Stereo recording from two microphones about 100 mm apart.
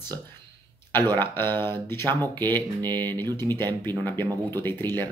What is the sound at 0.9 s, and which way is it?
Speech, 20° left (ahead or behind).